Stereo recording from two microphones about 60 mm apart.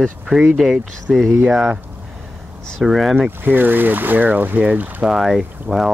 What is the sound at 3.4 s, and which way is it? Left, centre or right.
Speech, right.